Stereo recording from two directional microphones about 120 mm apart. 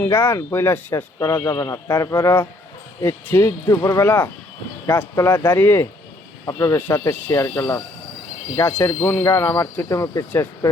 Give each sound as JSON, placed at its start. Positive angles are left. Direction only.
{"t": 0.0, "sound": "speech", "side_deg": 20}